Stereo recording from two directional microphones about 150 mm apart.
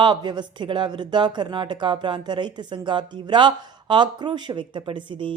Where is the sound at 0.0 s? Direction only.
30° right (ahead or behind).